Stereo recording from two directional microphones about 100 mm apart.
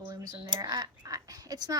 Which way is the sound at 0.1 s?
40° right (ahead or behind).